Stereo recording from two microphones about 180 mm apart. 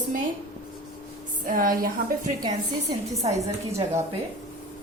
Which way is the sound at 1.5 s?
50° right (ahead or behind).